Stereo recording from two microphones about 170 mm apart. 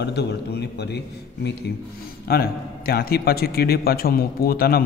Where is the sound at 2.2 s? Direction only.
65° left (ahead or behind).